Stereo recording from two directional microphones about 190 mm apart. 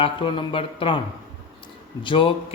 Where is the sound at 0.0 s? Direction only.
25° left (ahead or behind).